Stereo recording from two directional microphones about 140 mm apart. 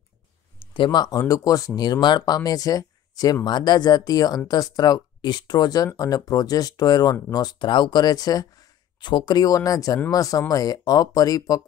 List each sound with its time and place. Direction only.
0.6 s speech: 35° left (ahead or behind)